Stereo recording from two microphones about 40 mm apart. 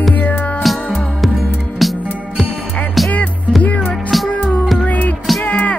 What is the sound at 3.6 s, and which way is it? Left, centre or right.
Music, left.